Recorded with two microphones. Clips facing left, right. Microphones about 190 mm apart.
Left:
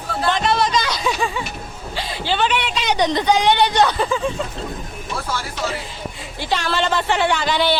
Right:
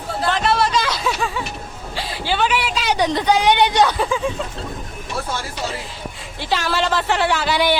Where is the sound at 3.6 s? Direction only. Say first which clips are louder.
Even; 15° right (ahead or behind).